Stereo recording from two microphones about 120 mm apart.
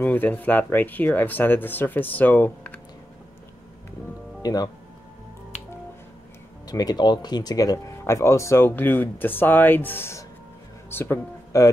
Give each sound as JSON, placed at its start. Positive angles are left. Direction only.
{"t": 0.0, "sound": "speech", "side_deg": 15}
{"t": 4.4, "sound": "speech", "side_deg": 30}
{"t": 6.7, "sound": "speech", "side_deg": 35}